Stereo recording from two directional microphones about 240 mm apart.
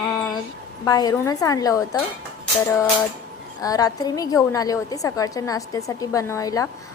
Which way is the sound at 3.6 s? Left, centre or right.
Centre.